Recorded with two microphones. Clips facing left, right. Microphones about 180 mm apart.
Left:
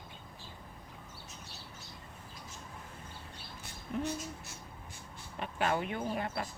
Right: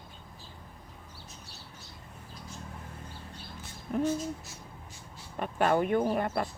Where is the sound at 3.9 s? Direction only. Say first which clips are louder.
Right 6 dB; 50° right (ahead or behind).